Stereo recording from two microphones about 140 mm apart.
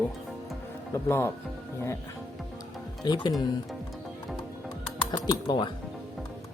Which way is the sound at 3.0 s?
30° left (ahead or behind).